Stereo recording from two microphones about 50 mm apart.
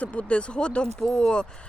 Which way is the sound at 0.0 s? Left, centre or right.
Left.